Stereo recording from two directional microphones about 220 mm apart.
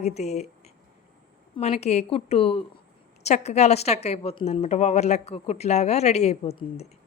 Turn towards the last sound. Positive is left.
turn(degrees=30)  # may be behind; listen again after turning